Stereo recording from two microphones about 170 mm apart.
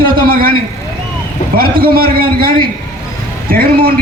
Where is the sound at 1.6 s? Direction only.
60° right (ahead or behind).